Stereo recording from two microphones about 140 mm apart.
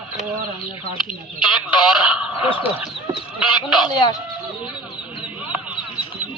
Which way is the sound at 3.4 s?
5° right (ahead or behind).